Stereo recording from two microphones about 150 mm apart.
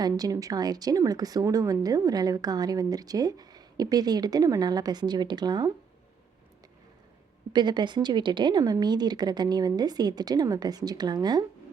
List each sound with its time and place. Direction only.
0.0 s speech: 25° right (ahead or behind)
7.5 s speech: 30° right (ahead or behind)